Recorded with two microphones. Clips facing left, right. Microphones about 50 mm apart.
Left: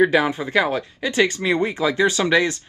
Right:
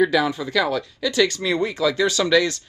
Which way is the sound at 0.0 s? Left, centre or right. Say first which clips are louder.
Left 2 dB; left.